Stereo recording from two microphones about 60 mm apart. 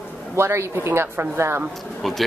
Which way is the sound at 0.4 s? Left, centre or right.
Right.